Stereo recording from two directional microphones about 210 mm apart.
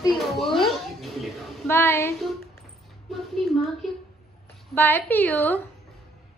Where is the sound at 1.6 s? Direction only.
10° left (ahead or behind).